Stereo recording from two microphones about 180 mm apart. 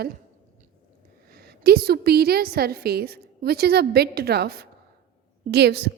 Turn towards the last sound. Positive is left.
turn(degrees=-65)  # may be behind; listen again after turning